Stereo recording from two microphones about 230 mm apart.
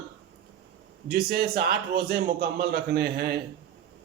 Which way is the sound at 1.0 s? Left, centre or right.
Right.